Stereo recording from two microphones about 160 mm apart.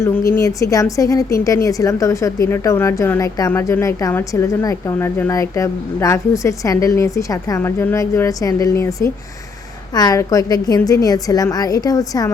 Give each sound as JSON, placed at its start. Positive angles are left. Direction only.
{"t": 0.3, "sound": "a woman's voice", "side_deg": 20}